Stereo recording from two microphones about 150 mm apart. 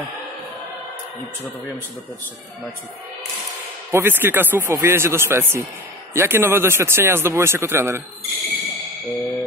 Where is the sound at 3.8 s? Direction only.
15° right (ahead or behind).